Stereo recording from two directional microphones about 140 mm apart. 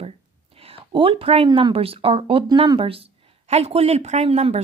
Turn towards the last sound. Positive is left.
turn(degrees=-50)  # may be behind; listen again after turning